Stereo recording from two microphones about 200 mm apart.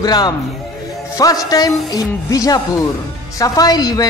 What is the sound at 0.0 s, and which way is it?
Speech, 20° left (ahead or behind).